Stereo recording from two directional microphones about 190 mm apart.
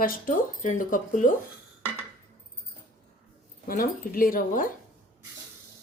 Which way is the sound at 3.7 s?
50° left (ahead or behind).